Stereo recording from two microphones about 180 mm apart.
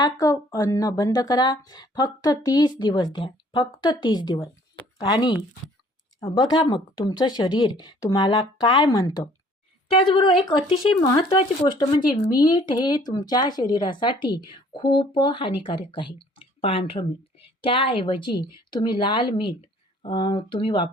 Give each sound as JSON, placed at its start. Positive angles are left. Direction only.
{"t": 0.0, "sound": "speech", "side_deg": 20}
{"t": 10.7, "sound": "speech", "side_deg": 25}